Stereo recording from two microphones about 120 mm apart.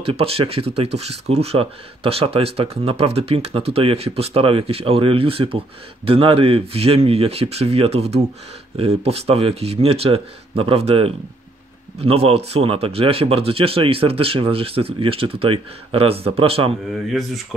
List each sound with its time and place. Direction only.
0.0 s speech: 55° right (ahead or behind)
17.1 s speech: centre (ahead or behind)